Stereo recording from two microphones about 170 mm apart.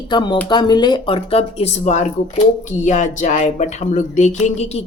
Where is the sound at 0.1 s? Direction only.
25° left (ahead or behind).